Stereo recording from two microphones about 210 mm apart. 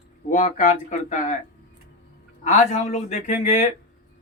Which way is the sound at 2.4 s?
35° left (ahead or behind).